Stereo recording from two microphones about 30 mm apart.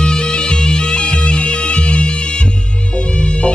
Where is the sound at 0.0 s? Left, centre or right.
Left.